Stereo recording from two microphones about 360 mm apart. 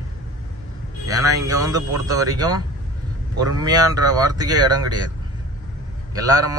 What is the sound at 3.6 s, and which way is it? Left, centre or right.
A man's voice, centre.